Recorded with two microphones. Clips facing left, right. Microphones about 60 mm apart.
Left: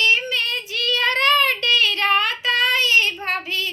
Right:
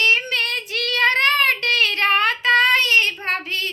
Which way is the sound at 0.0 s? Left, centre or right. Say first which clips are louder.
Right 1 dB; right.